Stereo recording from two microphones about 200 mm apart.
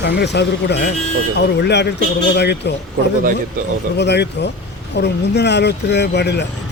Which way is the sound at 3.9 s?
60° left (ahead or behind).